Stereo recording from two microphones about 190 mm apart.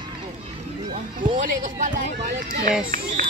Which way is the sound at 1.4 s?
45° right (ahead or behind).